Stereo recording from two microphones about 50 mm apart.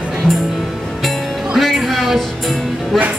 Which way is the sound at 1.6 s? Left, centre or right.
Centre.